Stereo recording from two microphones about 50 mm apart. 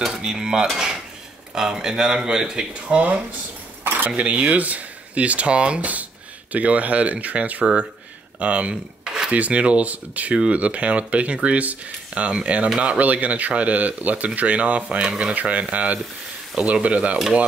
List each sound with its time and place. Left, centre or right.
0.1 s speech: centre
2.7 s speech: right
3.8 s cutlery: right
4.1 s speech: right
9.0 s a sound: centre
9.3 s speech: right